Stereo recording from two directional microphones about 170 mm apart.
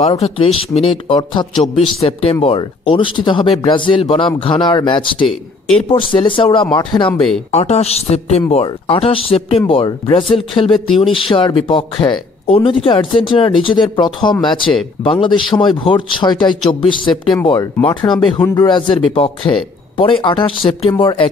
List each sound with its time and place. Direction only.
0.2 s speech: 35° left (ahead or behind)
5.2 s speech: centre (ahead or behind)
6.2 s speech: 30° left (ahead or behind)
7.1 s speech: 5° left (ahead or behind)
7.5 s speech: 40° left (ahead or behind)